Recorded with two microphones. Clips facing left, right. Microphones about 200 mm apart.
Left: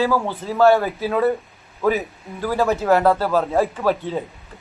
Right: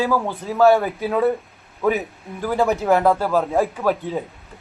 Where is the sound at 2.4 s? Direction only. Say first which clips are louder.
Even; 15° right (ahead or behind).